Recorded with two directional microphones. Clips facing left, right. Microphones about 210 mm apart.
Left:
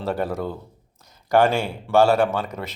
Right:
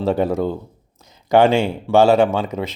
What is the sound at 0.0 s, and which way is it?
Speech, 20° right (ahead or behind).